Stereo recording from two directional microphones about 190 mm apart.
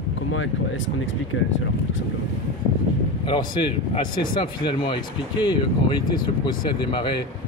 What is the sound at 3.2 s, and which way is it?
Speech, 25° left (ahead or behind).